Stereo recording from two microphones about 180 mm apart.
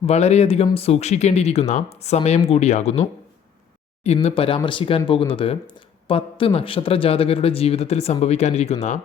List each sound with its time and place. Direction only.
0.0 s speech: 35° left (ahead or behind)